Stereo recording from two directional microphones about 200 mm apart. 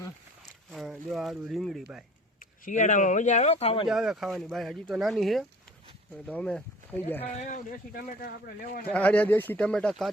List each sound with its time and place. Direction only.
0.7 s speech: centre (ahead or behind)
2.4 s speech: 40° left (ahead or behind)
3.8 s speech: centre (ahead or behind)
7.4 s speech: 40° left (ahead or behind)
8.9 s speech: 5° left (ahead or behind)